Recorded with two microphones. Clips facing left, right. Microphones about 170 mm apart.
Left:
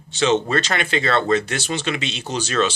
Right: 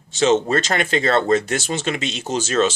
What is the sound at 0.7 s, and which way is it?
Speech, 40° right (ahead or behind).